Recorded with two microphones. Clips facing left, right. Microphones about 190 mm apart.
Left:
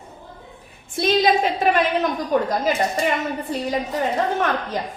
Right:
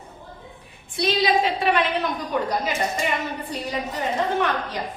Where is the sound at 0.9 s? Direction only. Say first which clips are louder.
Left 4 dB; 45° left (ahead or behind).